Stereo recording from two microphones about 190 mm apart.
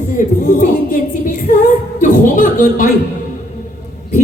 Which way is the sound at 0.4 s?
40° left (ahead or behind).